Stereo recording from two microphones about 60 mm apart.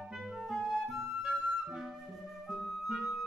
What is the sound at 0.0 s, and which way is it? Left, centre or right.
Music, centre.